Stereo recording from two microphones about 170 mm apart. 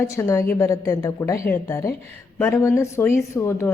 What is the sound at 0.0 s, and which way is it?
A woman's voice, 15° left (ahead or behind).